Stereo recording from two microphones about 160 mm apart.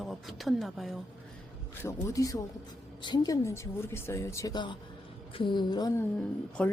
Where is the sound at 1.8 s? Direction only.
20° left (ahead or behind).